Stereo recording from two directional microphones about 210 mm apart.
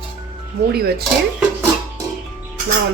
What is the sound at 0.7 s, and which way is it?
Speech, 50° right (ahead or behind).